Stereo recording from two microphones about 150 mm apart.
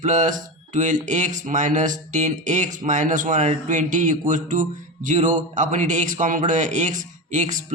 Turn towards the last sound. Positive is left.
turn(degrees=-55)  # may be behind; listen again after turning